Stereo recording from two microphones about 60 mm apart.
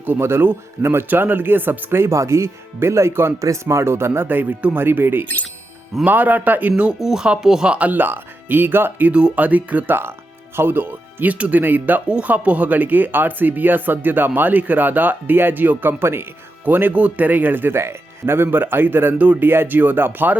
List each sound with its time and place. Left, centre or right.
0.0 s speech: right
3.3 s speech: right
7.0 s speech: centre; by 9.0 s right
9.0 s speech: right